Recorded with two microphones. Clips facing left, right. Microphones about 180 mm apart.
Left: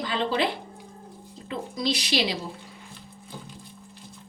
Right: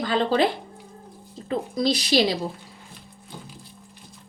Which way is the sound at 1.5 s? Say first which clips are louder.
Right 5 dB; 40° right (ahead or behind).